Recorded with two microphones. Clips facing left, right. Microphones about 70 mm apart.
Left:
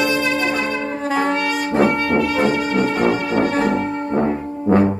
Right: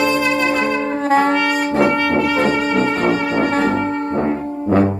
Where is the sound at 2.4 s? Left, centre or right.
Right.